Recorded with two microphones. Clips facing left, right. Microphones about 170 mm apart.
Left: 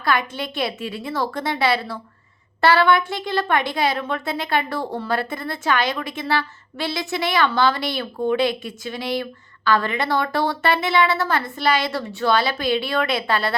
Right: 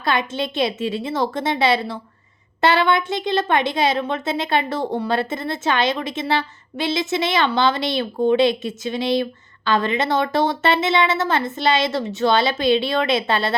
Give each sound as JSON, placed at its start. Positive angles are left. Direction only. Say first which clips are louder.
{"t": 0.0, "sound": "a woman's voice", "louder": "right 1 dB", "side_deg": -25}